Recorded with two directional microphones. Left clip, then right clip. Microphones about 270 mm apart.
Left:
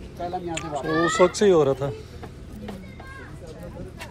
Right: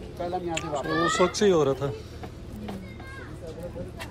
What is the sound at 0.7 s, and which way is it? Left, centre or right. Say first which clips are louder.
Speech: left 3 dB; centre.